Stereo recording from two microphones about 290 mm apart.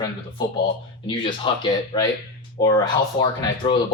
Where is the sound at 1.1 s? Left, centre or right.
Centre.